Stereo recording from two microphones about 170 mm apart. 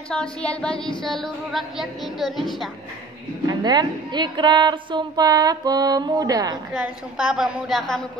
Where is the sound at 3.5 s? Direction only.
25° right (ahead or behind).